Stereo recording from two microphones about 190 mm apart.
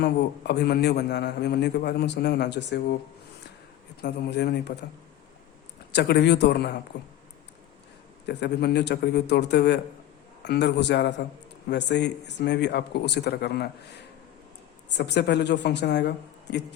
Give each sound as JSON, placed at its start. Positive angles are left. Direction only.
{"t": 0.0, "sound": "a man's voice", "side_deg": 60}
{"t": 4.0, "sound": "a man's voice", "side_deg": 60}
{"t": 5.9, "sound": "a man's voice", "side_deg": 60}
{"t": 8.3, "sound": "a man's voice", "side_deg": 65}
{"t": 14.8, "sound": "a man's voice", "side_deg": 65}